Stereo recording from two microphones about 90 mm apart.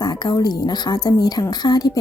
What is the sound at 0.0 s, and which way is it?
A woman's voice, 50° left (ahead or behind).